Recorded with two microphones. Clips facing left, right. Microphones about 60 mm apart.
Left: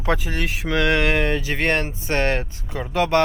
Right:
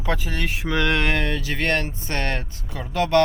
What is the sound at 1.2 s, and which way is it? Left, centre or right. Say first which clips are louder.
Speech: left 3 dB; left.